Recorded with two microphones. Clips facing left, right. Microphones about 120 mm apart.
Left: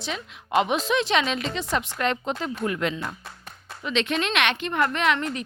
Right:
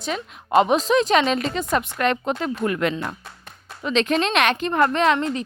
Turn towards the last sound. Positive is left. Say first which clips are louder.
# right 5 dB
turn(degrees=-30)  # may be behind; listen again after turning